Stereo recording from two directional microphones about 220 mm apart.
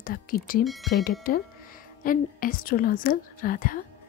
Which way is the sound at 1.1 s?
40° left (ahead or behind).